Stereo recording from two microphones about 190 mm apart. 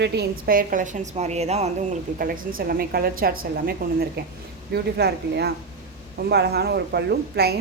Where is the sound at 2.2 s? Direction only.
50° right (ahead or behind).